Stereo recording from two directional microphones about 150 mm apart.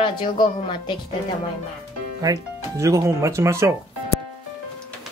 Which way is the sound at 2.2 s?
20° right (ahead or behind).